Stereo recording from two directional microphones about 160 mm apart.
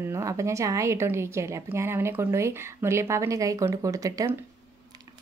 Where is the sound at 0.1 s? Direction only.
20° right (ahead or behind).